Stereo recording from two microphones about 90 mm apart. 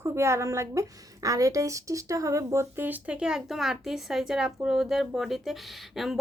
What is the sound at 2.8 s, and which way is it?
Speech, 15° right (ahead or behind).